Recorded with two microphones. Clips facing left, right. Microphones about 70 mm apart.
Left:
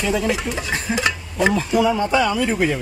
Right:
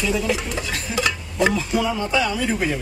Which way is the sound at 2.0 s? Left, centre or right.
Left.